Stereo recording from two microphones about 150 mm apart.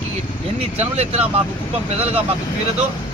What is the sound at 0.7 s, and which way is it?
Speech, 45° right (ahead or behind).